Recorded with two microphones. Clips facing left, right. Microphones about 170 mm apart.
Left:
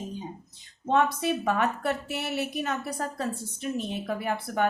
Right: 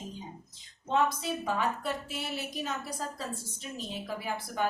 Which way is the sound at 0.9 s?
65° left (ahead or behind).